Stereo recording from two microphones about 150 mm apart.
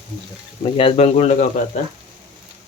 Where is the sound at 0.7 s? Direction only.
40° left (ahead or behind).